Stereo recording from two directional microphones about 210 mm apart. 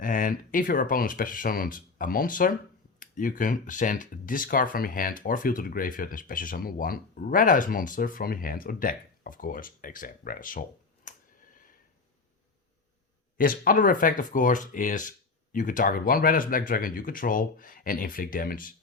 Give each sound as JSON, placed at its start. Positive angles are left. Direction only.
{"t": 0.0, "sound": "speech", "side_deg": 40}
{"t": 11.1, "sound": "a sound", "side_deg": 40}
{"t": 13.3, "sound": "speech", "side_deg": 40}